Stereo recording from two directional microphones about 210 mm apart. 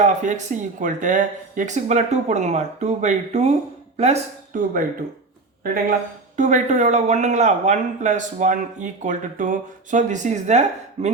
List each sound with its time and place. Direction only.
0.0 s speech: 35° right (ahead or behind)
6.3 s speech: 35° right (ahead or behind)